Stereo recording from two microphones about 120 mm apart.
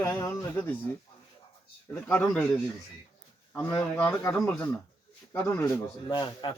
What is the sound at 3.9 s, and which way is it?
Speech, 10° left (ahead or behind).